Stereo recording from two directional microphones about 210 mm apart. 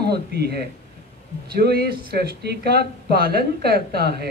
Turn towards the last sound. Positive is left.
turn(degrees=-50)  # may be behind; listen again after turning